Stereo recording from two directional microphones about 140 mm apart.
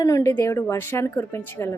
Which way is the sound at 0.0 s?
20° left (ahead or behind).